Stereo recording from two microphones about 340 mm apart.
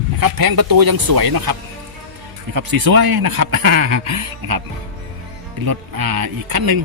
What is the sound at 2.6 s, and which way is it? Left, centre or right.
Speech, right.